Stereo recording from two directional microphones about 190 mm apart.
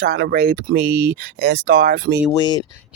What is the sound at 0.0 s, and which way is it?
Speech, 65° right (ahead or behind).